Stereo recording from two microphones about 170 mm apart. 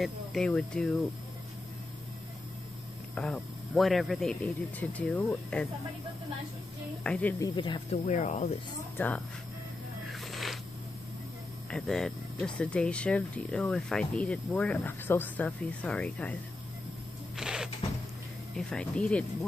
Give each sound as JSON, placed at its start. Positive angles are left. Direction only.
{"t": 0.0, "sound": "speech", "side_deg": 0}
{"t": 3.2, "sound": "speech", "side_deg": 5}
{"t": 7.0, "sound": "speech", "side_deg": 5}
{"t": 7.3, "sound": "speech", "side_deg": 25}
{"t": 8.0, "sound": "speech", "side_deg": 45}
{"t": 8.9, "sound": "speech", "side_deg": 10}
{"t": 10.0, "sound": "a sound", "side_deg": 0}
{"t": 11.7, "sound": "speech", "side_deg": 5}
{"t": 17.4, "sound": "a sound", "side_deg": -5}
{"t": 18.6, "sound": "speech", "side_deg": 5}